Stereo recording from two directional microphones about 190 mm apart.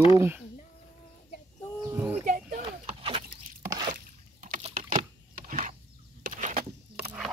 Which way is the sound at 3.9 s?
45° right (ahead or behind).